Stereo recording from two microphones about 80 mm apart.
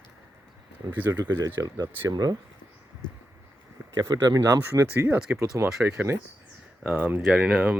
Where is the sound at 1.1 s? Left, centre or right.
Right.